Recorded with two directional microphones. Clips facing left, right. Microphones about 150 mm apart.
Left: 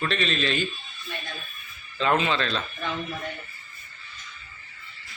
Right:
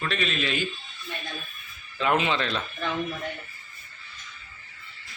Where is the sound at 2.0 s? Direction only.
15° right (ahead or behind).